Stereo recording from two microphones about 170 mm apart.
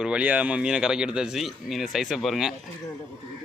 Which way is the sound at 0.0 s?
5° right (ahead or behind).